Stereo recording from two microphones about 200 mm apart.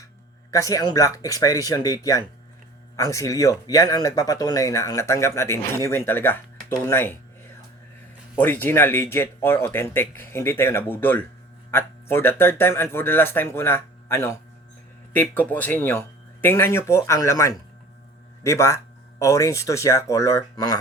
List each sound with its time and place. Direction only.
0.5 s speech: 15° left (ahead or behind)
6.8 s a sound: 10° left (ahead or behind)
8.4 s speech: 10° left (ahead or behind)